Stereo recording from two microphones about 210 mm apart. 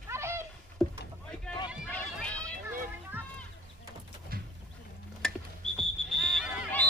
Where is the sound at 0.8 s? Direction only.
Centre (ahead or behind).